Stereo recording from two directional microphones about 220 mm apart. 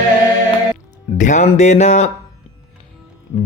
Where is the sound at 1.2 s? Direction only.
35° left (ahead or behind).